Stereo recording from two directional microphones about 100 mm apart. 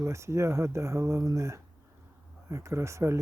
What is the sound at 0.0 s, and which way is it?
Speech, 30° right (ahead or behind).